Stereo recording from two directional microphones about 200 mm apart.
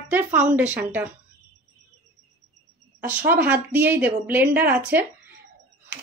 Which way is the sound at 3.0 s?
10° right (ahead or behind).